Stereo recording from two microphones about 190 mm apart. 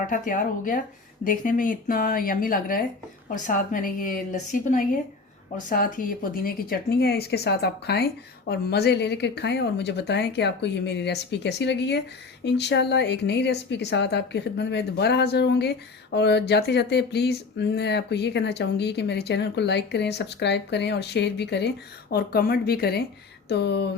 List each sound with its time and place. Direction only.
0.1 s a woman's voice: 45° left (ahead or behind); by 21.7 s 65° left (ahead or behind)
22.1 s a woman's voice: 50° left (ahead or behind)